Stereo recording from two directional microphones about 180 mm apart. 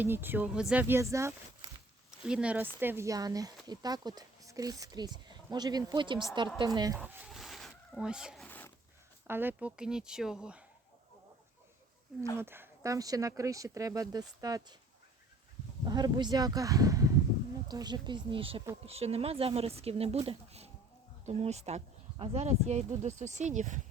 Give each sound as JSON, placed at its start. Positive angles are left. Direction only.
{"t": 0.0, "sound": "speech", "side_deg": -10}
{"t": 2.0, "sound": "speech", "side_deg": -5}
{"t": 7.0, "sound": "a sound", "side_deg": -10}
{"t": 8.4, "sound": "a sound", "side_deg": 10}
{"t": 9.2, "sound": "speech", "side_deg": -10}
{"t": 12.4, "sound": "speech", "side_deg": -15}
{"t": 15.9, "sound": "speech", "side_deg": -20}